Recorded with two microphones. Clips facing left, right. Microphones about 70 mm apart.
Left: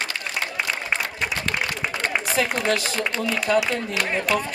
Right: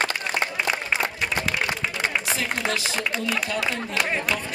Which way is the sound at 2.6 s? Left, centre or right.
Left.